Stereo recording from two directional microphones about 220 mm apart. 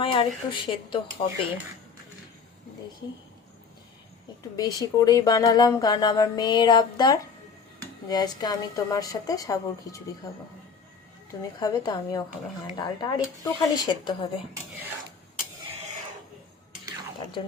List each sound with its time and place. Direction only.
0.0 s speech: 25° left (ahead or behind)
4.5 s speech: 15° left (ahead or behind)
11.6 s speech: 20° left (ahead or behind)